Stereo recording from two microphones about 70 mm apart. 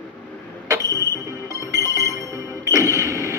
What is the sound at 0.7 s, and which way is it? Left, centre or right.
Fire alarm, right.